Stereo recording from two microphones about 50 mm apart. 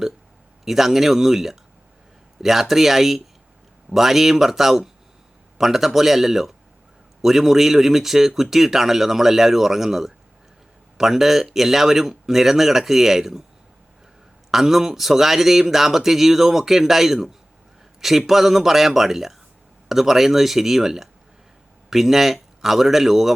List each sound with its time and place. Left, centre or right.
0.6 s speech: centre
14.5 s speech: centre